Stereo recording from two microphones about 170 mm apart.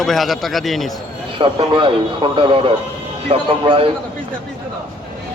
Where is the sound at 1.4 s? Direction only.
30° right (ahead or behind).